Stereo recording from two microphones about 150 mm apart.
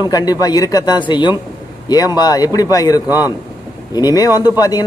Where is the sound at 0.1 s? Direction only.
25° left (ahead or behind).